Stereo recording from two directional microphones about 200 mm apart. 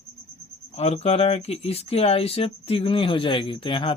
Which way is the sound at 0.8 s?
30° left (ahead or behind).